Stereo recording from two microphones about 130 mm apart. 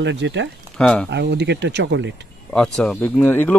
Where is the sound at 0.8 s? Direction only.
5° left (ahead or behind).